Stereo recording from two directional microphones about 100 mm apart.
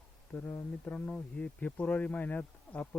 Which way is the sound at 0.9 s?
10° left (ahead or behind).